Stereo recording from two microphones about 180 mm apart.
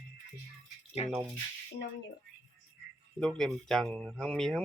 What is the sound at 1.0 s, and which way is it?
Speech, 35° left (ahead or behind).